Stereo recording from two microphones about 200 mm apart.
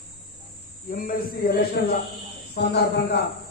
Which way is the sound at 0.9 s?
45° left (ahead or behind).